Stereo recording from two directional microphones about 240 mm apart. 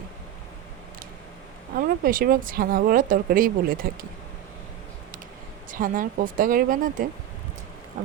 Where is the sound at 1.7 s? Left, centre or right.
Right.